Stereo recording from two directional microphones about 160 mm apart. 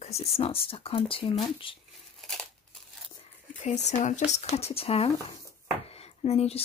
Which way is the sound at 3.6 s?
45° left (ahead or behind).